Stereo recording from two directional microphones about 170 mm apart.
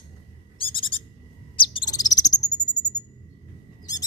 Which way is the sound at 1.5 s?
30° left (ahead or behind).